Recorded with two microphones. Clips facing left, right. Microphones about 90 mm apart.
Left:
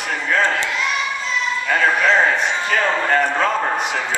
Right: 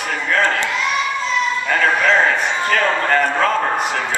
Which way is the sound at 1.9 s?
Centre (ahead or behind).